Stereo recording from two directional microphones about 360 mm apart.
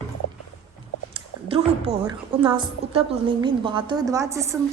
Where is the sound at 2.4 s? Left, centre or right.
Centre.